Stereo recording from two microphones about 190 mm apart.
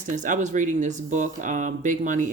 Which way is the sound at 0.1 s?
40° right (ahead or behind).